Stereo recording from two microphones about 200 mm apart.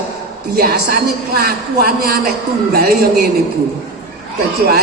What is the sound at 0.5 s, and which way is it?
A man's voice, 50° right (ahead or behind).